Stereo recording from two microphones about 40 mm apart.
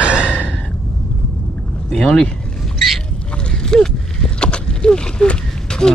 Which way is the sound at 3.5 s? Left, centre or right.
Centre.